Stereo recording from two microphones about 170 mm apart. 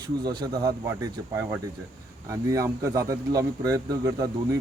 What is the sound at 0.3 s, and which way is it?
Speech, 25° right (ahead or behind).